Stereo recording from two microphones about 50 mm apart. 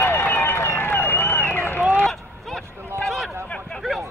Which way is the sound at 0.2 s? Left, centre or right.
Left.